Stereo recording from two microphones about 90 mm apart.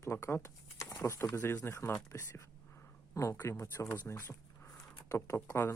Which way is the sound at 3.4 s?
35° left (ahead or behind).